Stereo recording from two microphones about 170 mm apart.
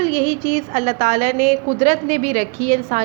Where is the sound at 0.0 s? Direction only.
35° right (ahead or behind).